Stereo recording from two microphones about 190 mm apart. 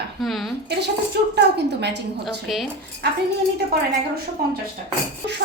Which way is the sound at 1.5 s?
65° right (ahead or behind).